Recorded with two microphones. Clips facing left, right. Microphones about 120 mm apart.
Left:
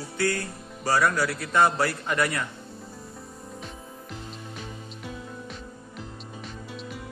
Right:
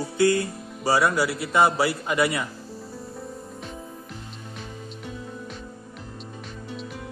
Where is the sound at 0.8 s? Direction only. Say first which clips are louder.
Right 2 dB; 10° right (ahead or behind).